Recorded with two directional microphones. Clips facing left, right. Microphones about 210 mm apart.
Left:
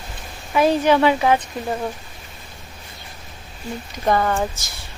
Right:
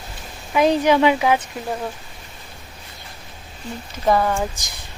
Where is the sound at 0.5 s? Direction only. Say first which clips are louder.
Even; 15° right (ahead or behind).